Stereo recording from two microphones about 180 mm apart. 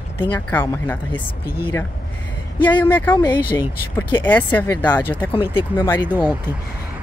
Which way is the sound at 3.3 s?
25° left (ahead or behind).